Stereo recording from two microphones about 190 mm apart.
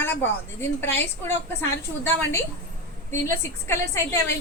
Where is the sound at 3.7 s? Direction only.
15° left (ahead or behind).